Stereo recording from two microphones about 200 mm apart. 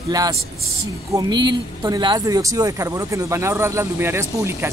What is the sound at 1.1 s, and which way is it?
Speech, 20° right (ahead or behind).